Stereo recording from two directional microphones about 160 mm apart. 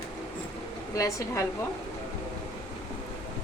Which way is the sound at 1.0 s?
20° left (ahead or behind).